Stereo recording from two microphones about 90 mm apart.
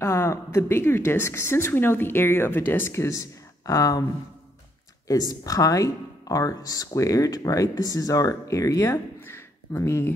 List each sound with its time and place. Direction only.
0.0 s a woman's voice: 35° left (ahead or behind)
5.0 s speech: 45° left (ahead or behind)
8.9 s speech: 25° left (ahead or behind)